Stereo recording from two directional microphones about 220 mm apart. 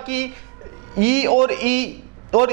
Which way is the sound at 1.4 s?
10° right (ahead or behind).